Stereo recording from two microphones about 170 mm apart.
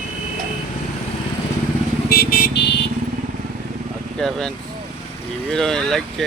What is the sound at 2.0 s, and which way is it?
Vehicle, 65° left (ahead or behind).